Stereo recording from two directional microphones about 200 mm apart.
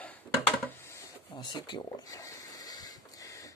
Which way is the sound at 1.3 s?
20° left (ahead or behind).